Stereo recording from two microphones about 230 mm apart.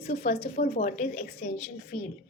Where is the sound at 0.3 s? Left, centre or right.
Left.